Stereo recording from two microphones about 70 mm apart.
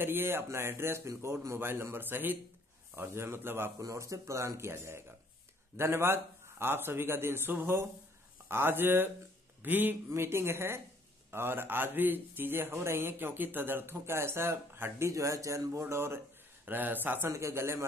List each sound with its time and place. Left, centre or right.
0.0 s a man's voice: right
3.8 s a man's voice: right
16.6 s speech: right
17.3 s speech: right